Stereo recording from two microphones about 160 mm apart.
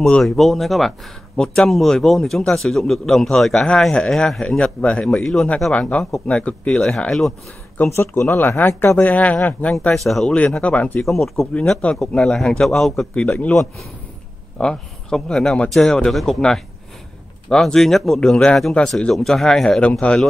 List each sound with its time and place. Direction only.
0.0 s speech: centre (ahead or behind)